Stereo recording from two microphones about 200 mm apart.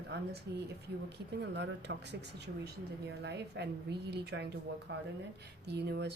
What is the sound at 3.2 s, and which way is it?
Speech, 55° right (ahead or behind).